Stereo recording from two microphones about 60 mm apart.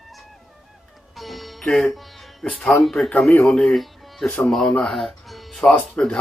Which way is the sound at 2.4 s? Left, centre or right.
Left.